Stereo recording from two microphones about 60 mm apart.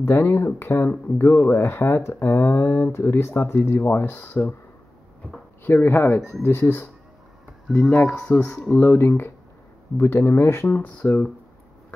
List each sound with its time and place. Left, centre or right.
0.0 s speech: left
5.6 s speech: left
7.7 s speech: centre
8.1 s speech: left
10.7 s speech: left